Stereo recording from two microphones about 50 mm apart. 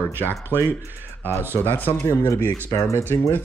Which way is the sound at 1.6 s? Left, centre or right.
Left.